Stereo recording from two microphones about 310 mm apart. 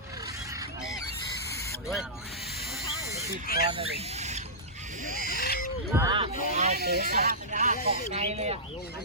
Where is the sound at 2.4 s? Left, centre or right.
Centre.